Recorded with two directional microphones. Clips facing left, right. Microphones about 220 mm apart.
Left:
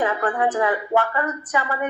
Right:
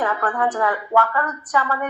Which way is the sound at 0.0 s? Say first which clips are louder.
Left 1 dB; 20° left (ahead or behind).